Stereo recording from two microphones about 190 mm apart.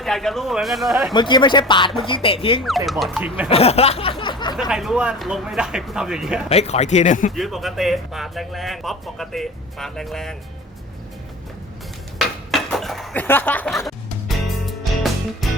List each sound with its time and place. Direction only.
0.0 s speech: centre (ahead or behind)
1.1 s speech: 25° left (ahead or behind)
2.6 s speech: centre (ahead or behind)
3.5 s a sound: 30° left (ahead or behind)
4.7 s speech: 5° right (ahead or behind)
6.5 s speech: 35° left (ahead or behind)
7.3 s speech: centre (ahead or behind)
12.5 s a sound: centre (ahead or behind)
13.2 s music: 10° left (ahead or behind)